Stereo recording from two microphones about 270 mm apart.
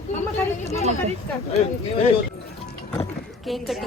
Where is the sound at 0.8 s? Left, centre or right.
Right.